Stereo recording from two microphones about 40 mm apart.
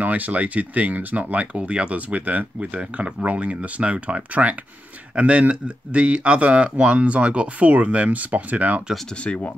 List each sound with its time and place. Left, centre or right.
0.0 s speech: right
9.2 s speech: left